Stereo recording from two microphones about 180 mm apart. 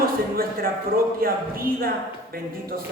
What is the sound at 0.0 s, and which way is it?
Speech, 55° right (ahead or behind).